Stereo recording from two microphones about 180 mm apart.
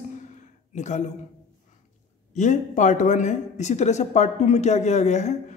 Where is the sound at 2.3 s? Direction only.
40° left (ahead or behind).